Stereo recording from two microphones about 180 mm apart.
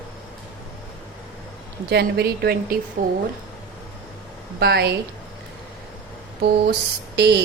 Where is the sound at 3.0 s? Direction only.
50° right (ahead or behind).